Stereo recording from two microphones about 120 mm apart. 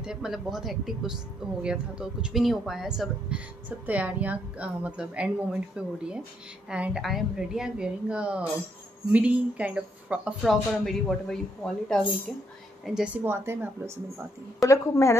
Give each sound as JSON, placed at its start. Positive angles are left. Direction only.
{"t": 0.0, "sound": "speech", "side_deg": -5}
{"t": 10.4, "sound": "speech", "side_deg": 0}
{"t": 12.8, "sound": "speech", "side_deg": -5}
{"t": 14.6, "sound": "a woman's voice", "side_deg": 25}